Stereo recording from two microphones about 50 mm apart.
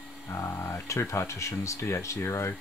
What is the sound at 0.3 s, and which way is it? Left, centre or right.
Speech, left.